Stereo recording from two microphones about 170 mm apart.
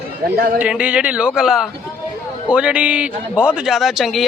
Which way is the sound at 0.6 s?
5° right (ahead or behind).